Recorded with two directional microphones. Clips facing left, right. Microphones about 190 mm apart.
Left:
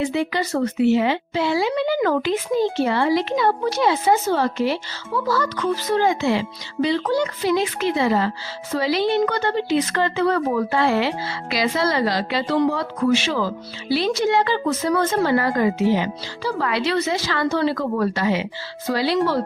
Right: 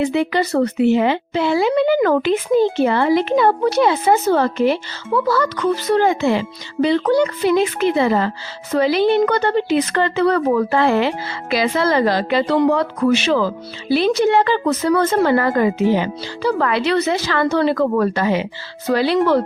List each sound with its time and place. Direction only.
0.0 s speech: 65° right (ahead or behind)
13.8 s speech: 55° right (ahead or behind)
18.9 s speech: 65° right (ahead or behind)